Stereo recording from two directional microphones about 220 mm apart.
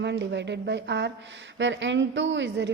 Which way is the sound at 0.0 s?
50° right (ahead or behind).